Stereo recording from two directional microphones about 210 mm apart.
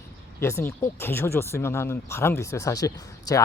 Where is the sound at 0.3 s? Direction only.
10° left (ahead or behind).